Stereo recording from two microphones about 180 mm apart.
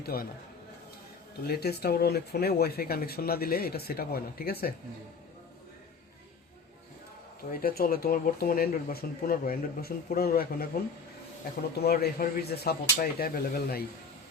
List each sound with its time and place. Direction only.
0.0 s speech: 60° left (ahead or behind)
1.5 s speech: 60° left (ahead or behind)
7.6 s speech: 55° left (ahead or behind)
11.8 s speech: 60° left (ahead or behind)